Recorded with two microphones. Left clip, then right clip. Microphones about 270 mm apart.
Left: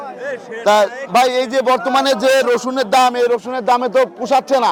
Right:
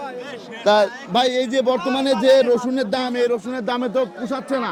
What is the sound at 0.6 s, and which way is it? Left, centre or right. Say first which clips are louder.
Speech: left 3 dB; left.